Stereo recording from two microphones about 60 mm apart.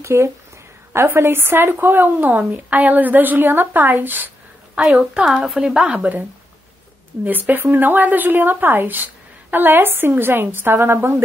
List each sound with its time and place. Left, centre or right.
0.0 s speech: right
4.8 s a woman's voice: centre
7.2 s speech: right